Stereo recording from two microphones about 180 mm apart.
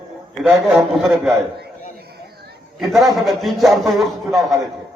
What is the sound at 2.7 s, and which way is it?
A man's voice, centre (ahead or behind).